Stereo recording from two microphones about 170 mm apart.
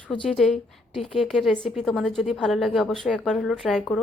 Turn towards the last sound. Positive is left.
turn(degrees=0)  # may be behind; listen again after turning